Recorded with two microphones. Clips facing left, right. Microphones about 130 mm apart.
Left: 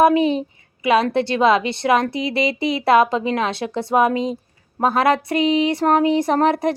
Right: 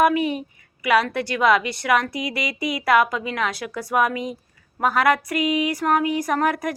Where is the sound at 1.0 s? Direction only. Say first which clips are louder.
Left 4 dB; 25° left (ahead or behind).